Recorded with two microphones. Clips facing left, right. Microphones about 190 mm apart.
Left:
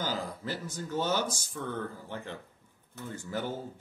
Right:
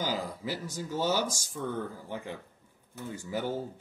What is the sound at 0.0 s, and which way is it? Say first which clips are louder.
Speech: right 1 dB; 10° right (ahead or behind).